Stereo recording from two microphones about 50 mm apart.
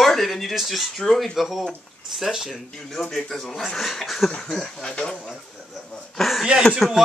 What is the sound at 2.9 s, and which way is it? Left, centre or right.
Speech, centre.